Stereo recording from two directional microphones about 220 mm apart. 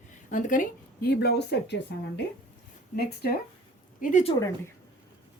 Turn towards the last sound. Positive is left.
turn(degrees=35)  # may be behind; listen again after turning